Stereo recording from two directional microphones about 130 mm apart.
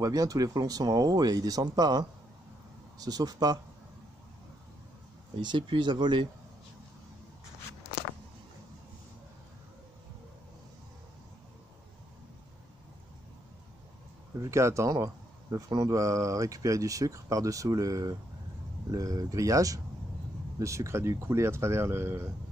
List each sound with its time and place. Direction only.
0.0 s speech: 30° right (ahead or behind)
5.4 s speech: 35° right (ahead or behind)
14.4 s speech: 20° right (ahead or behind)